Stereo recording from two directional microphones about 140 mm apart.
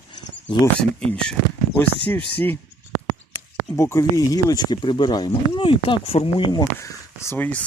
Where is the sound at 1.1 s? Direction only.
5° left (ahead or behind).